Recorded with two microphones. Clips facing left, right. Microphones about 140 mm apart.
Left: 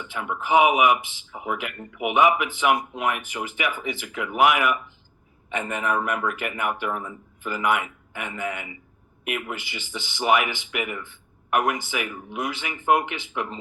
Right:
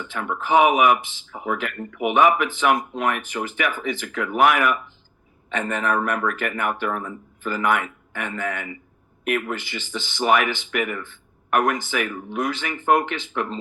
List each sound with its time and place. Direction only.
0.0 s speech: 15° left (ahead or behind)